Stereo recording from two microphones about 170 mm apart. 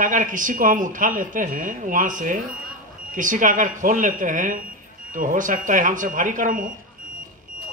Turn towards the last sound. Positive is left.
turn(degrees=-50)  # may be behind; listen again after turning